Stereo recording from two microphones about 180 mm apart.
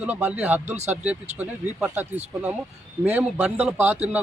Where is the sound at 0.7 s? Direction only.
40° right (ahead or behind).